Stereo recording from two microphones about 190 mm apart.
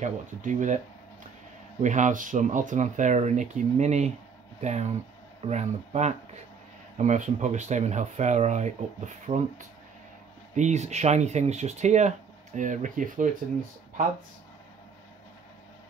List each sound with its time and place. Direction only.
0.0 s speech: 40° right (ahead or behind)
1.8 s speech: 40° right (ahead or behind)
10.5 s speech: 40° right (ahead or behind)